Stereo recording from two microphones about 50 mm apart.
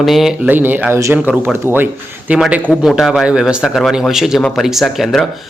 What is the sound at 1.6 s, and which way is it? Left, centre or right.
Speech, right.